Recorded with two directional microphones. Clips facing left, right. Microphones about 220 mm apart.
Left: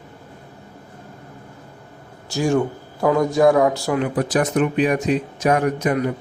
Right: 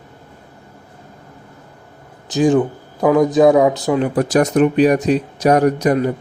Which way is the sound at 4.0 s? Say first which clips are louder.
Right 5 dB; 45° right (ahead or behind).